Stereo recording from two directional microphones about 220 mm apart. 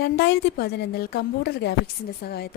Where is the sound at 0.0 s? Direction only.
50° left (ahead or behind).